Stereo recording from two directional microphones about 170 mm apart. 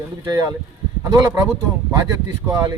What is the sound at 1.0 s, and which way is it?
Speech, 15° right (ahead or behind).